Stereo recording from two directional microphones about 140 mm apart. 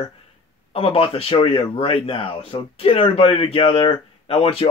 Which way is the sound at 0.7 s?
40° left (ahead or behind).